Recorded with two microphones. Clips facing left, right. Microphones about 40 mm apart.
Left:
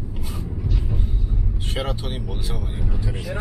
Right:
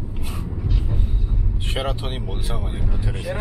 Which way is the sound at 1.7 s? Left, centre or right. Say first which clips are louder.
Right 2 dB; centre.